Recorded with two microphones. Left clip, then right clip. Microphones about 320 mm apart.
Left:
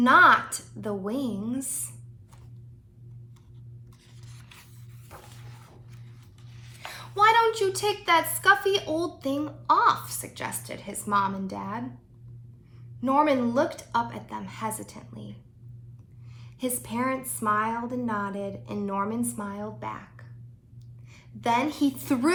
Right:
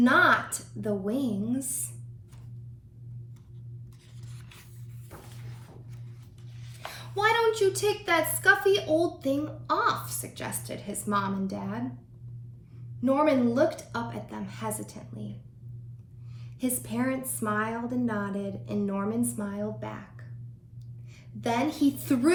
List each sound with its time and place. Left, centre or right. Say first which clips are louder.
0.0 s a sound: left 4 dB; centre
0.8 s a woman's voice: right 1 dB; centre
6.9 s a woman's voice: left 5 dB; centre
13.1 s a woman's voice: left 1 dB; centre
16.6 s a woman's voice: left 2 dB; centre
21.4 s a woman's voice: left 2 dB; centre